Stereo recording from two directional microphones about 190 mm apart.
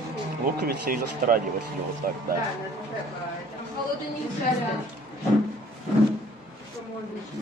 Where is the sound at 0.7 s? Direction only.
50° right (ahead or behind).